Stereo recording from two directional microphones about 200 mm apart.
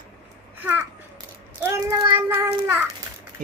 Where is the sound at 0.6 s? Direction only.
10° right (ahead or behind).